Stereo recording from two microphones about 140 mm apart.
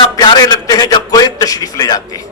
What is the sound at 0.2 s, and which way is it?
A man's voice, 30° left (ahead or behind).